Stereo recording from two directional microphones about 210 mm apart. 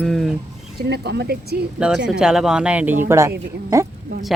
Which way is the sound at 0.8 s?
50° right (ahead or behind).